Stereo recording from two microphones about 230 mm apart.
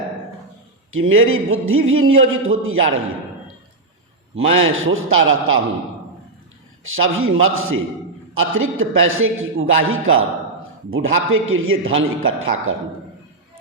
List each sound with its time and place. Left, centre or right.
0.9 s a man's voice: right
4.4 s a man's voice: right
6.8 s a man's voice: right